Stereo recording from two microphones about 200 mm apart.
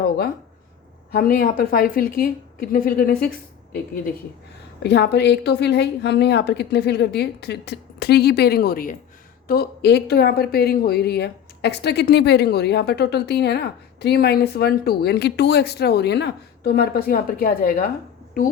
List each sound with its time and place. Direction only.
1.1 s speech: 45° left (ahead or behind)
4.8 s a woman's voice: 55° left (ahead or behind)